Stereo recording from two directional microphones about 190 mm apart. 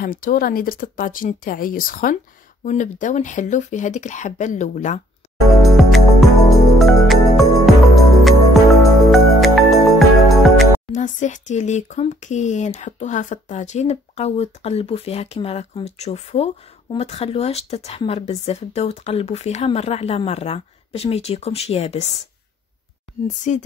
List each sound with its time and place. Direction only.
0.0 s speech: 50° left (ahead or behind)
5.6 s music: centre (ahead or behind)
10.9 s speech: 40° left (ahead or behind)
23.2 s speech: 40° left (ahead or behind)